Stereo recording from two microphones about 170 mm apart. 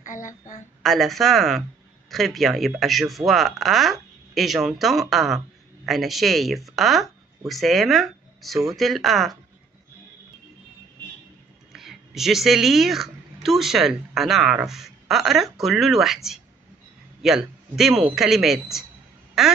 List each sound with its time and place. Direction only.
0.0 s a woman's voice: 50° left (ahead or behind)
0.8 s speech: centre (ahead or behind)
11.7 s a woman's voice: centre (ahead or behind)
19.4 s quack: centre (ahead or behind)